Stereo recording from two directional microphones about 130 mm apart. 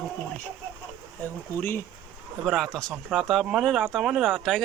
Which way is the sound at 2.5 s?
5° left (ahead or behind).